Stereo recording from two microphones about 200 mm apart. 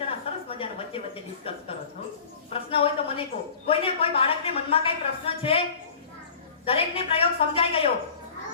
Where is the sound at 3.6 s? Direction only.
30° left (ahead or behind).